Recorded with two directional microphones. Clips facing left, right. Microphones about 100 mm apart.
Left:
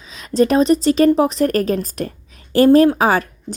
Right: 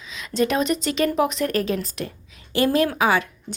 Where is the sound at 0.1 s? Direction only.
40° left (ahead or behind).